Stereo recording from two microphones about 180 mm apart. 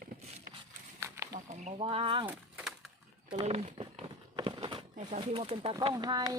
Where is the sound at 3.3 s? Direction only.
30° right (ahead or behind).